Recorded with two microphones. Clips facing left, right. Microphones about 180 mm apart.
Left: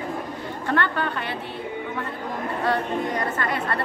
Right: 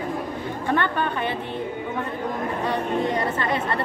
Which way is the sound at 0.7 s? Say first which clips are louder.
Right 1 dB; 15° right (ahead or behind).